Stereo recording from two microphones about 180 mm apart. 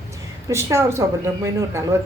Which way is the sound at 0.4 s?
15° right (ahead or behind).